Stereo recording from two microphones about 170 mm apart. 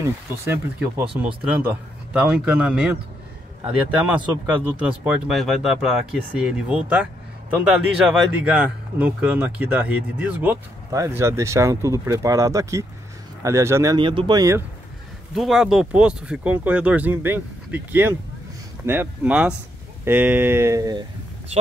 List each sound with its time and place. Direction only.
0.0 s speech: 15° right (ahead or behind)
13.9 s speech: 30° right (ahead or behind)
15.3 s speech: centre (ahead or behind); by 21.0 s 20° right (ahead or behind)